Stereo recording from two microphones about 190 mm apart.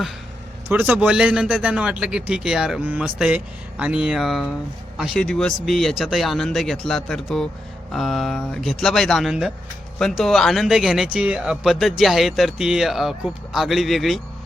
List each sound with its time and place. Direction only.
0.7 s speech: 10° right (ahead or behind)